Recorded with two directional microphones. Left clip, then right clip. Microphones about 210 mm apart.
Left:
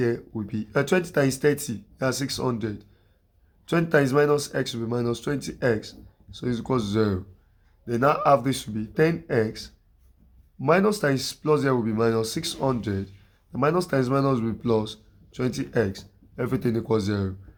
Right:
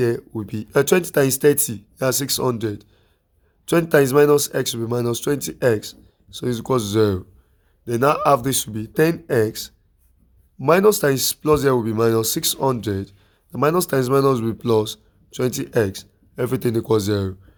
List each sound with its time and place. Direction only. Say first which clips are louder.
0.0 s speech: right 5 dB; 50° right (ahead or behind)